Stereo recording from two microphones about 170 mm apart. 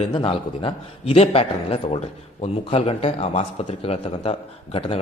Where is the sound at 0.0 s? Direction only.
30° left (ahead or behind).